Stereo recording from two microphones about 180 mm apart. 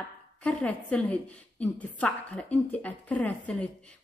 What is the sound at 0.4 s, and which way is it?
A woman's voice, 5° left (ahead or behind).